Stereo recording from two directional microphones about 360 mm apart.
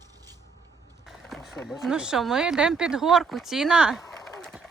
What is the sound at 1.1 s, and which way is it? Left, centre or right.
Speech, centre.